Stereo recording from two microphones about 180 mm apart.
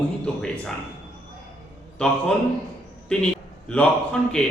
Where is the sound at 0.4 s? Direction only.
5° left (ahead or behind).